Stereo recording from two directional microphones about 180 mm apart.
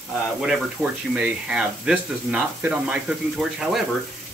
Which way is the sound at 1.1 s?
5° right (ahead or behind).